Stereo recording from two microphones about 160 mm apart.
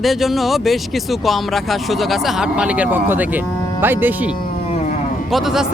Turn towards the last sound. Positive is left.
turn(degrees=0)  # may be behind; listen again after turning